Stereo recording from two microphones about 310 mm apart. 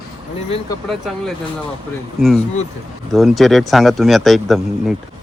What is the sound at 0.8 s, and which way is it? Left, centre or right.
Speech, centre.